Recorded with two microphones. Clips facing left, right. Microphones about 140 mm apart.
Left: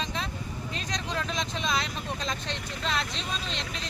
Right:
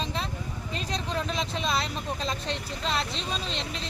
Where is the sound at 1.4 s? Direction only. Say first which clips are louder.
Right 1 dB; 5° right (ahead or behind).